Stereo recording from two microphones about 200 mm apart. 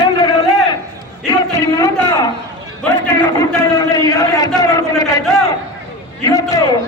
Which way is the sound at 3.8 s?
20° left (ahead or behind).